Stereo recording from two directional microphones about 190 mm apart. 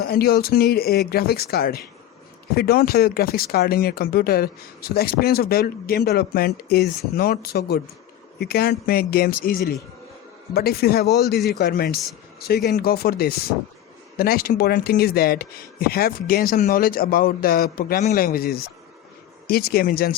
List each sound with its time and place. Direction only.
0.1 s a man's voice: 55° left (ahead or behind)